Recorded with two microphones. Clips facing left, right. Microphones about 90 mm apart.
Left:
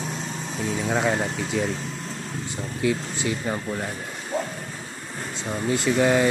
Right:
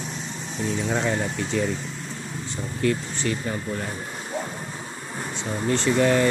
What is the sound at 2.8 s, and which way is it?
Speech, 10° left (ahead or behind).